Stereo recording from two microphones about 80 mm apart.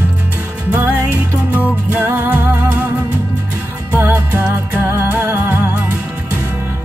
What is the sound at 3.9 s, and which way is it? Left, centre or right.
Music, right.